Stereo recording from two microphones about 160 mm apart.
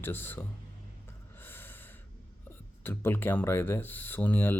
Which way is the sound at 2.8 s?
15° left (ahead or behind).